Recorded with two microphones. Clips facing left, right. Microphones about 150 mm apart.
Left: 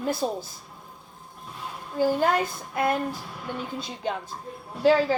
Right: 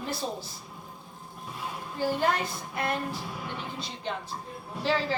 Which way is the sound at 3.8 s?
45° left (ahead or behind).